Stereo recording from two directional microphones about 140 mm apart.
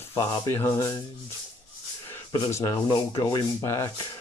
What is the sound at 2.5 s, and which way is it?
Speech, 25° left (ahead or behind).